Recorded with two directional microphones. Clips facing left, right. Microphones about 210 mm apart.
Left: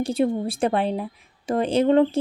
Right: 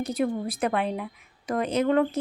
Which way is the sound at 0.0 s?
25° left (ahead or behind).